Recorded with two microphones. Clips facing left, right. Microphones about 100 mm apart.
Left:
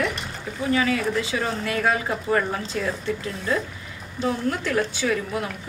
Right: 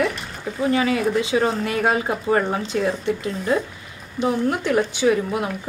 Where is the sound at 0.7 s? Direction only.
25° right (ahead or behind).